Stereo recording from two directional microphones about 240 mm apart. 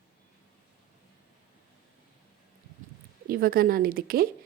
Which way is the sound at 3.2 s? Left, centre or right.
Right.